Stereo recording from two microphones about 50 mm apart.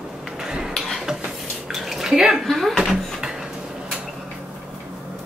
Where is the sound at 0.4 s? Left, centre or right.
Centre.